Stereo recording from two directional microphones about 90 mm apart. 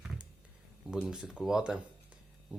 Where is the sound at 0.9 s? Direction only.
5° right (ahead or behind).